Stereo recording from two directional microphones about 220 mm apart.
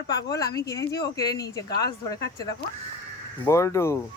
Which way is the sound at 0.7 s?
45° left (ahead or behind).